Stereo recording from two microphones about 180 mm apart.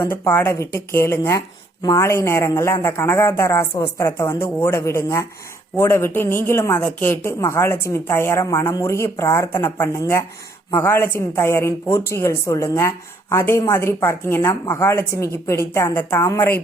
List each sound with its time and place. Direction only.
0.0 s a woman's voice: 10° left (ahead or behind)